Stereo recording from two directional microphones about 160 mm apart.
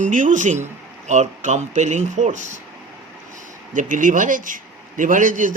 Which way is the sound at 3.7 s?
55° right (ahead or behind).